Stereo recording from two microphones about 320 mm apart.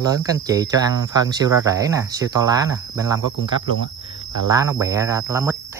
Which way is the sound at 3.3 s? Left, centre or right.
Left.